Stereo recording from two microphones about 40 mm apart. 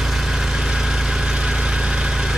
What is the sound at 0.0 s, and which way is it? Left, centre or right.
Vehicle, centre.